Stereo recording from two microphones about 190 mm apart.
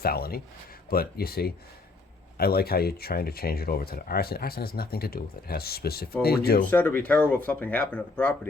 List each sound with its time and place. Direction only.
0.0 s speech: 55° left (ahead or behind)
6.7 s speech: 10° left (ahead or behind)